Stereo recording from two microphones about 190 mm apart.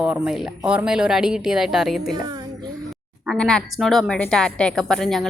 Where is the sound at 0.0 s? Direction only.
5° right (ahead or behind).